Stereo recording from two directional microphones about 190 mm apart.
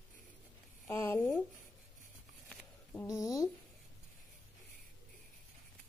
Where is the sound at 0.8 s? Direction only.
10° left (ahead or behind).